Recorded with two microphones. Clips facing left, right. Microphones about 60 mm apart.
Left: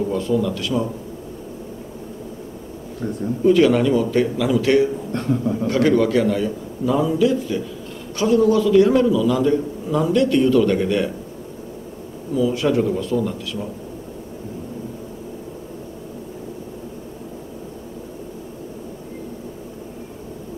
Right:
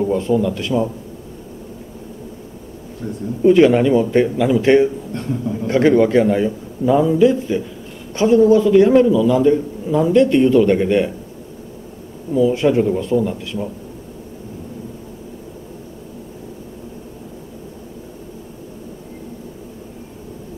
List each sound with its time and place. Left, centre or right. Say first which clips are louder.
0.1 s a man's voice: right 3 dB; right
3.4 s a man's voice: right 4 dB; right
12.4 s a man's voice: right 4 dB; right